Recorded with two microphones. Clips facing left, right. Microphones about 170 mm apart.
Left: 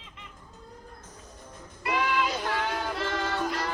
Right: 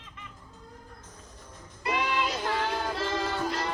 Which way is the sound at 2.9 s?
25° right (ahead or behind).